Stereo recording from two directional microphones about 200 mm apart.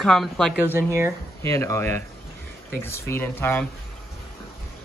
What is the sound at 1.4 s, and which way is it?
Speech, 15° left (ahead or behind).